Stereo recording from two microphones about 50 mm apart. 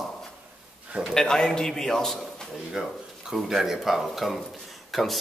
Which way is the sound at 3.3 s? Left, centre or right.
Centre.